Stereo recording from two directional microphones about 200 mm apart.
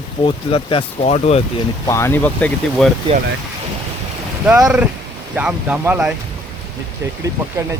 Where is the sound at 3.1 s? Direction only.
25° right (ahead or behind).